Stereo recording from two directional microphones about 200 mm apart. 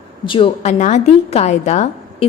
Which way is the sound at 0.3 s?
25° left (ahead or behind).